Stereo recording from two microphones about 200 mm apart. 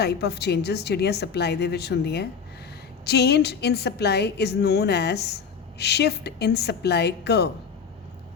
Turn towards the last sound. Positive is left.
turn(degrees=55)  # may be behind; listen again after turning